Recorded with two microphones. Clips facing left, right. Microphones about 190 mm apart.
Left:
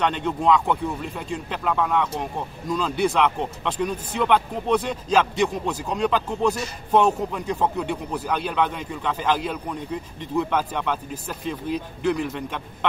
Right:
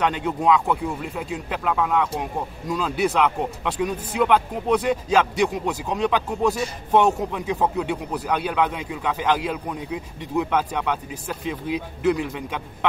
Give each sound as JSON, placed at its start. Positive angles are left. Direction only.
{"t": 0.0, "sound": "a man's voice", "side_deg": -10}